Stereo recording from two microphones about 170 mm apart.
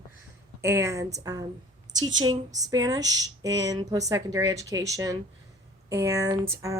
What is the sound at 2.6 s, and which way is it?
Speech, 20° right (ahead or behind).